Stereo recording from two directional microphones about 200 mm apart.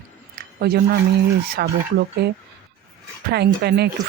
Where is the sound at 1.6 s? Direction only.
55° right (ahead or behind).